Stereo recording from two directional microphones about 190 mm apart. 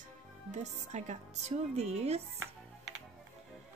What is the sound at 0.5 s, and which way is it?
Speech, 35° right (ahead or behind).